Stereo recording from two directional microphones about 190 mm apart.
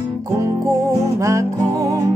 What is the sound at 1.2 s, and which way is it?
Music, 15° right (ahead or behind).